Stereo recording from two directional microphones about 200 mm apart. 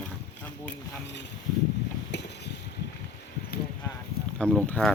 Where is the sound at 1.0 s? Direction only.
60° left (ahead or behind).